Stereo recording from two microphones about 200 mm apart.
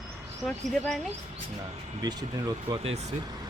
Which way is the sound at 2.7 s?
30° right (ahead or behind).